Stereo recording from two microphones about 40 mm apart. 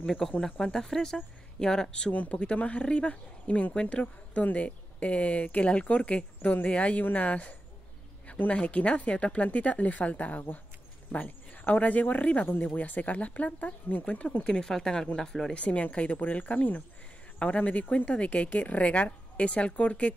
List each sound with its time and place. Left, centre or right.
0.0 s speech: centre
2.0 s speech: left
8.5 s speech: left
14.4 s speech: centre
15.5 s speech: left